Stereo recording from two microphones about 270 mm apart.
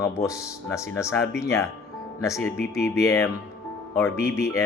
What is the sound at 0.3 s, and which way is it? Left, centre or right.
Speech, centre.